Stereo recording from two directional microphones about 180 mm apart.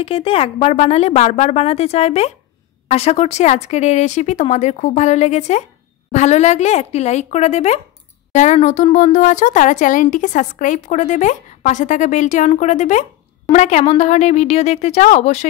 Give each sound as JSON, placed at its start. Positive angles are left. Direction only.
{"t": 0.0, "sound": "speech", "side_deg": 30}